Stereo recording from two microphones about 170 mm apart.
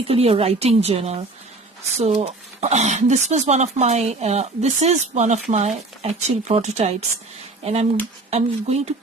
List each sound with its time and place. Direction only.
0.1 s speech: 35° right (ahead or behind)